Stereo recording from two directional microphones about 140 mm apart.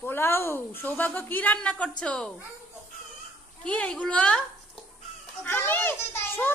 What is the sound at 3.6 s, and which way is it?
Speech, 10° left (ahead or behind).